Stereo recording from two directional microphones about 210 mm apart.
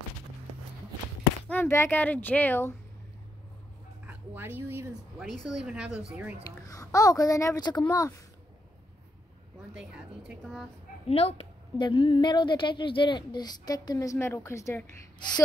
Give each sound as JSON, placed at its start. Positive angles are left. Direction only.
{"t": 1.5, "sound": "speech", "side_deg": 10}
{"t": 4.1, "sound": "dog", "side_deg": -10}
{"t": 5.2, "sound": "a woman's voice", "side_deg": 0}
{"t": 6.6, "sound": "speech", "side_deg": 15}
{"t": 9.8, "sound": "a woman's voice", "side_deg": -5}
{"t": 11.1, "sound": "speech", "side_deg": 30}